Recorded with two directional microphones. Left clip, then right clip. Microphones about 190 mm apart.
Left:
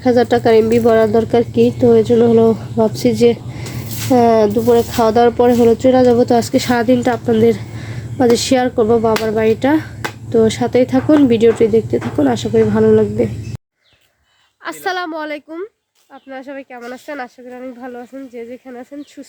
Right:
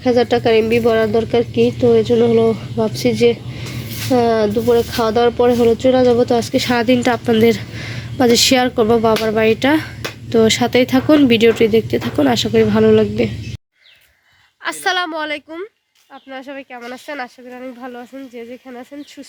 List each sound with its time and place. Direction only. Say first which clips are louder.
0.0 s a woman's voice: left 2 dB; 25° left (ahead or behind); by 13.3 s centre (ahead or behind)
14.6 s speech: right 2 dB; centre (ahead or behind)